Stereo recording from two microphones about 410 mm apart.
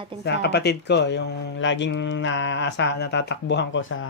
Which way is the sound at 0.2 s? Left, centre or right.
Left.